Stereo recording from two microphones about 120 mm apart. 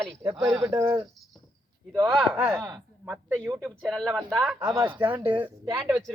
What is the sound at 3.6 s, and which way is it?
Speech, centre (ahead or behind).